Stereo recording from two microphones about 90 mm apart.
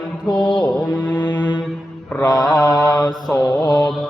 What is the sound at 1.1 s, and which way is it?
Music, 55° left (ahead or behind).